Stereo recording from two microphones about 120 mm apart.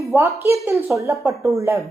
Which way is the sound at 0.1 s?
15° right (ahead or behind).